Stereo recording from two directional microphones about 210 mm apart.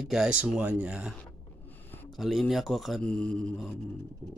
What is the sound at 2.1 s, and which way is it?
Speech, centre (ahead or behind).